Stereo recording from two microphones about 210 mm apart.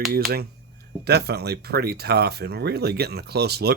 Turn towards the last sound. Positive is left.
turn(degrees=-50)  # may be behind; listen again after turning